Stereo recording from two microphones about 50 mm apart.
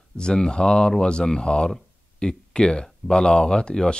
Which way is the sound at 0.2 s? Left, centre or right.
Centre.